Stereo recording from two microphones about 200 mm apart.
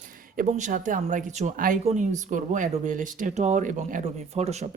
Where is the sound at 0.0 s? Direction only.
40° right (ahead or behind).